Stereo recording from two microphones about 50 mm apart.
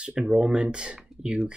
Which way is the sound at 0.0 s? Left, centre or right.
Centre.